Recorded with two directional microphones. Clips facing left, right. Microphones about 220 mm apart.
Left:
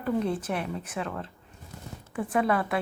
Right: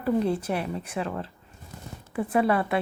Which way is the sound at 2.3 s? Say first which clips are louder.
Right 2 dB; 5° right (ahead or behind).